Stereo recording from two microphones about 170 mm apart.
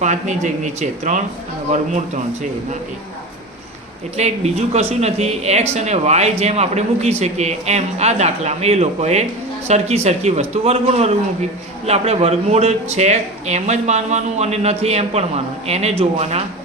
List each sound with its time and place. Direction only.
0.0 s speech: 45° right (ahead or behind)
4.2 s speech: 40° right (ahead or behind)